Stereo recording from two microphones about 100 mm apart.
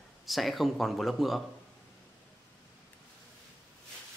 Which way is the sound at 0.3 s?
Centre (ahead or behind).